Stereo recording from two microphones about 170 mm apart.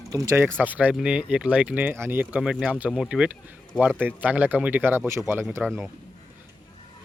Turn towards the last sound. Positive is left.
turn(degrees=-10)  # may be behind; listen again after turning